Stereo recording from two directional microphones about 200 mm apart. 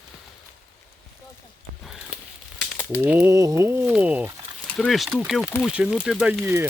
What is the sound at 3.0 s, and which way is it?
Speech, 10° right (ahead or behind).